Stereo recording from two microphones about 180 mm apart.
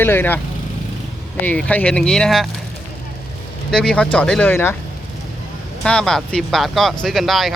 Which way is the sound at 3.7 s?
5° left (ahead or behind).